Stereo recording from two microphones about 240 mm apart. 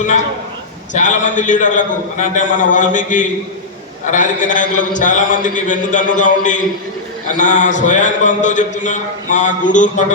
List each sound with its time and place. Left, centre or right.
0.9 s a man's voice: left